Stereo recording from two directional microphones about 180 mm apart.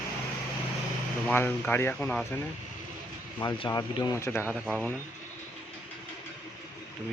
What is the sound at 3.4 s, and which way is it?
Speech, 25° left (ahead or behind).